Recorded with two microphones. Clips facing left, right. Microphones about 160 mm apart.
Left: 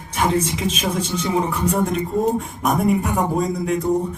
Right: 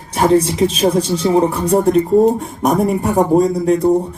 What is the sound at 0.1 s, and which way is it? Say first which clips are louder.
A woman's voice: right 7 dB; 35° right (ahead or behind).